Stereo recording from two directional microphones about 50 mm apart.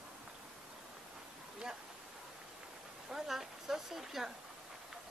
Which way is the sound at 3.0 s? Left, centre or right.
Centre.